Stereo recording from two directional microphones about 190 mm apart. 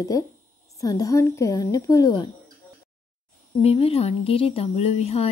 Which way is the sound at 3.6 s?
30° left (ahead or behind).